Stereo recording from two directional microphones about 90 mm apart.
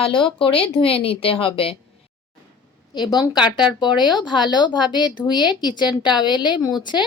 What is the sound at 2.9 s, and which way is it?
Speech, 50° left (ahead or behind).